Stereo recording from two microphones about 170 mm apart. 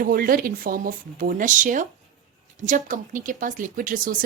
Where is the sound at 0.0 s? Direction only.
60° right (ahead or behind).